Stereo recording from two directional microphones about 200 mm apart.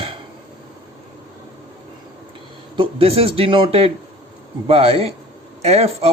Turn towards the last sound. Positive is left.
turn(degrees=-30)  # may be behind; listen again after turning